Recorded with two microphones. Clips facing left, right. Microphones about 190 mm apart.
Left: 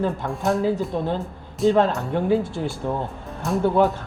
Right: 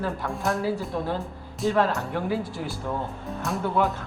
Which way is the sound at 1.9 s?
Centre (ahead or behind).